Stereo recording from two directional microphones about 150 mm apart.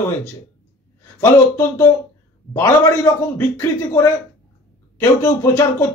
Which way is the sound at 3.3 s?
15° left (ahead or behind).